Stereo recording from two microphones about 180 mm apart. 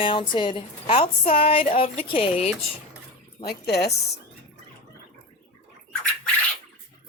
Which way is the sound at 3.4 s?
65° left (ahead or behind).